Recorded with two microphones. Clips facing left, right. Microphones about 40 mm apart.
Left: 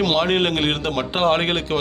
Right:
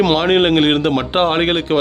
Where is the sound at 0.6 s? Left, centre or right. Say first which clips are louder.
Right 7 dB; right.